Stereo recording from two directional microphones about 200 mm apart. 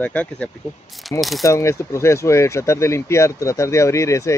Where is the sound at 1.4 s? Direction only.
15° left (ahead or behind).